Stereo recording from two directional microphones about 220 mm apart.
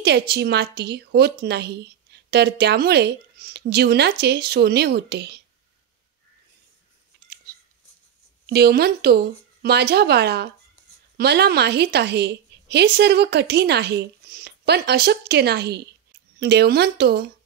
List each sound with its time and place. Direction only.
0.0 s a woman's voice: 50° right (ahead or behind)
8.5 s a woman's voice: 45° right (ahead or behind)